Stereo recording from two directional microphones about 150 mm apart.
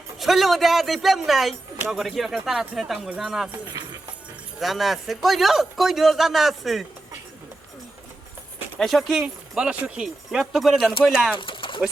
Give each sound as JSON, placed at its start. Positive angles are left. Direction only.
{"t": 0.2, "sound": "speech", "side_deg": 0}
{"t": 4.6, "sound": "speech", "side_deg": 0}
{"t": 8.8, "sound": "speech", "side_deg": 0}
{"t": 11.3, "sound": "pigeon", "side_deg": 35}